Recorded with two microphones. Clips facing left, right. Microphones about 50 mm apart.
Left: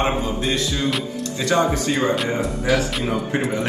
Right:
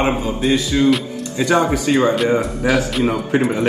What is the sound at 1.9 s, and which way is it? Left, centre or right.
Speech, right.